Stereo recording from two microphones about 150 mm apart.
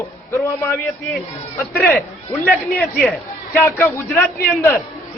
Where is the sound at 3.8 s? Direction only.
10° left (ahead or behind).